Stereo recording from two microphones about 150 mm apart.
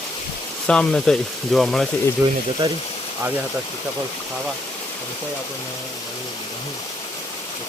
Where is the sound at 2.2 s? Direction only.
10° right (ahead or behind).